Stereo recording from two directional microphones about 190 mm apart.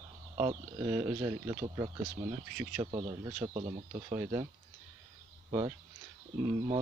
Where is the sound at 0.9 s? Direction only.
15° right (ahead or behind).